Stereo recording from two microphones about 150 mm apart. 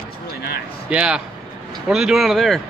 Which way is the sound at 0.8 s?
5° right (ahead or behind).